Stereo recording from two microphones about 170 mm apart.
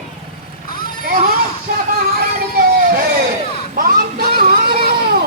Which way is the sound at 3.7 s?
60° right (ahead or behind).